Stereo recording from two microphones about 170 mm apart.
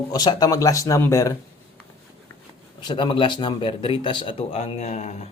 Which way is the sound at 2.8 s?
25° left (ahead or behind).